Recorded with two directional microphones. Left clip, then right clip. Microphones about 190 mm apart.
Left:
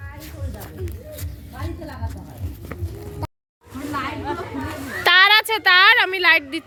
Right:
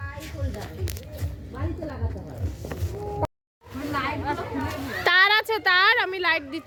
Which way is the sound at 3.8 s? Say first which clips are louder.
Left 1 dB; 40° left (ahead or behind).